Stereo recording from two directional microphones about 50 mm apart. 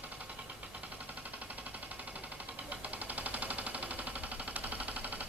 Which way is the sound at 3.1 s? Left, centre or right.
Right.